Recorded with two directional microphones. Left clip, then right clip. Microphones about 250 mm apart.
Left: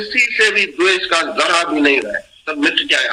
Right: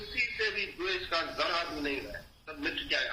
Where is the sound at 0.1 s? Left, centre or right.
Left.